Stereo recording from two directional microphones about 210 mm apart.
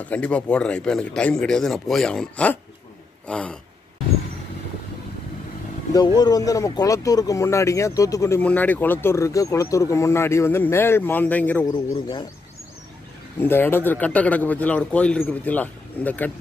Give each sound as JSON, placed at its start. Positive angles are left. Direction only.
{"t": 0.0, "sound": "speech", "side_deg": 5}
{"t": 5.9, "sound": "speech", "side_deg": 20}
{"t": 11.7, "sound": "speech", "side_deg": 20}
{"t": 13.4, "sound": "speech", "side_deg": 10}